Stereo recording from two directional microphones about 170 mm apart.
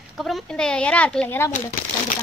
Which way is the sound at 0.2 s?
5° left (ahead or behind).